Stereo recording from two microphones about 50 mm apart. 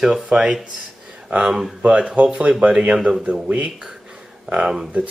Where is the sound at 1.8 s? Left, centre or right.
Right.